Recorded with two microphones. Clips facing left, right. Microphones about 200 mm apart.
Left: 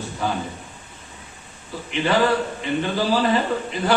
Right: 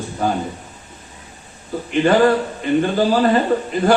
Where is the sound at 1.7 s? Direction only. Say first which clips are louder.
Right 7 dB; 50° right (ahead or behind).